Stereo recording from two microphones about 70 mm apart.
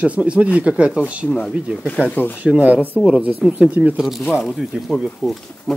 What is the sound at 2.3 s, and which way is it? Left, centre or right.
Speech, right.